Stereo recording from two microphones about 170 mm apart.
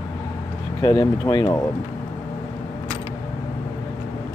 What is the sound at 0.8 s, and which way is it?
Speech, 25° left (ahead or behind).